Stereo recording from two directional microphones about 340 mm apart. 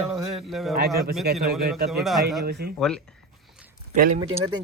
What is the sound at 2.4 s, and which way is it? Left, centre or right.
Speech, right.